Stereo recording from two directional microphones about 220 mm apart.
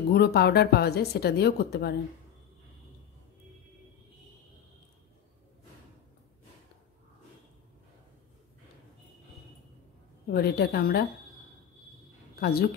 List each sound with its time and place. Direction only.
0.1 s a woman's voice: 45° left (ahead or behind)
10.3 s a woman's voice: 45° left (ahead or behind)
12.4 s a woman's voice: 45° left (ahead or behind)